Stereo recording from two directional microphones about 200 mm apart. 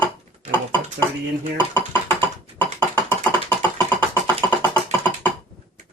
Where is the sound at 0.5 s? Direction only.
10° left (ahead or behind).